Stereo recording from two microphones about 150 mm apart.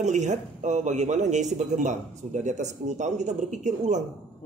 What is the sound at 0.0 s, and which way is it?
Speech, 50° right (ahead or behind).